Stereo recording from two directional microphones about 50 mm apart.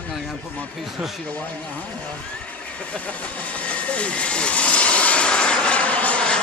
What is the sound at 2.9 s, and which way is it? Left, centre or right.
Vehicle, left.